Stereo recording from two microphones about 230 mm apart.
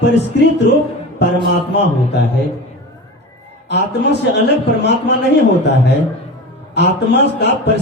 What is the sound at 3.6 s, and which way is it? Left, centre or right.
Speech, left.